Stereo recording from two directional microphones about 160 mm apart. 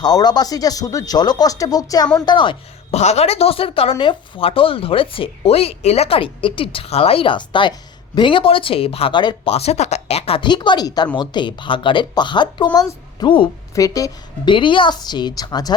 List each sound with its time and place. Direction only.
0.0 s speech: 25° left (ahead or behind)
3.0 s a woman's voice: 40° left (ahead or behind)
13.7 s speech: 20° left (ahead or behind)